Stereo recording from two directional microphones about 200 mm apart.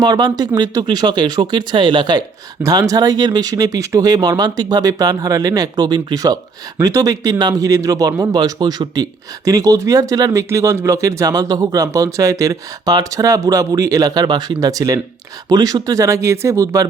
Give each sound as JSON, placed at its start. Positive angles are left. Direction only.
{"t": 0.0, "sound": "speech", "side_deg": -20}